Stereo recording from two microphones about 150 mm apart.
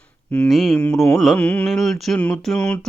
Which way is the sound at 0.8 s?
15° left (ahead or behind).